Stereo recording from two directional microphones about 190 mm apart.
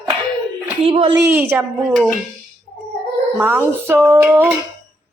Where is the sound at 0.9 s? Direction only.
30° right (ahead or behind).